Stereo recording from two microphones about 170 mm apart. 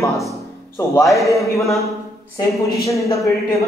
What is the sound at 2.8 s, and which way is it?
Speech, 20° left (ahead or behind).